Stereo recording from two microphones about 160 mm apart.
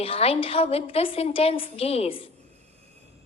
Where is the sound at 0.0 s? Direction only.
35° left (ahead or behind).